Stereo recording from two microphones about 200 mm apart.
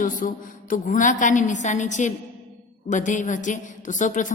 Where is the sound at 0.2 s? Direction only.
45° left (ahead or behind).